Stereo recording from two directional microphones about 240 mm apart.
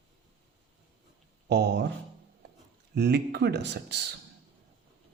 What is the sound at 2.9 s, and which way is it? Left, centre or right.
Speech, right.